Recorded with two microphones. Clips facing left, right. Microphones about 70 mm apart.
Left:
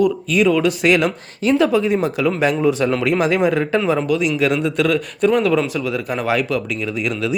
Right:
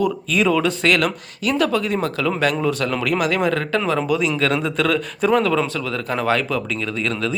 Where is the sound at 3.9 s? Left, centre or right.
Centre.